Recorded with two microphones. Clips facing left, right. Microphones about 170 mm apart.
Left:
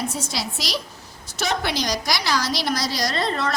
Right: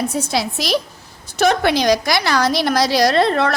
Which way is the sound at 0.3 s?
55° right (ahead or behind).